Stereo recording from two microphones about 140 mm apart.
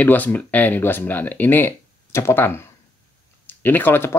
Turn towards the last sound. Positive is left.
turn(degrees=15)  # may be behind; listen again after turning